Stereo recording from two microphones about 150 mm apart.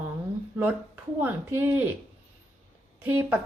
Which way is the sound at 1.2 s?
15° right (ahead or behind).